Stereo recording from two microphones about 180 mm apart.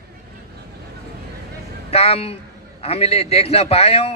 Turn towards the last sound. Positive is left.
turn(degrees=35)  # may be behind; listen again after turning